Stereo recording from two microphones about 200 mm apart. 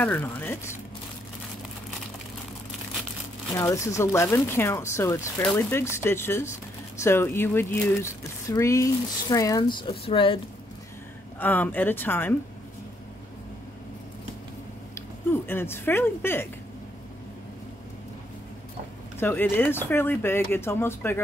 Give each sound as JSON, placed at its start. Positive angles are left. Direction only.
{"t": 0.0, "sound": "speech", "side_deg": 10}
{"t": 3.5, "sound": "speech", "side_deg": 15}
{"t": 11.3, "sound": "speech", "side_deg": 10}
{"t": 15.0, "sound": "speech", "side_deg": 10}
{"t": 19.1, "sound": "speech", "side_deg": 10}